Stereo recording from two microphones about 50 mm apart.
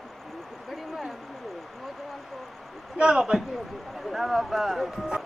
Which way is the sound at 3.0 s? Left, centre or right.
Centre.